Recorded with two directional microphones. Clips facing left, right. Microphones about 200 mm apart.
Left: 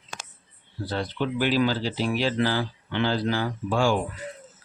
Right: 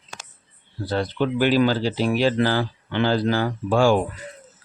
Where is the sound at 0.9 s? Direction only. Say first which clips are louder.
Right 5 dB; 55° right (ahead or behind).